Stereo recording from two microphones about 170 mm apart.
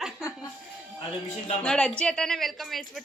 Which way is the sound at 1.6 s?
5° left (ahead or behind).